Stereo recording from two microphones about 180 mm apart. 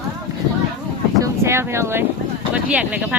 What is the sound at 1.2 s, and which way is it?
Speech, 15° right (ahead or behind).